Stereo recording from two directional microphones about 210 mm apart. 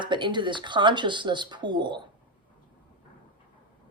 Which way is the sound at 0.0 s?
20° right (ahead or behind).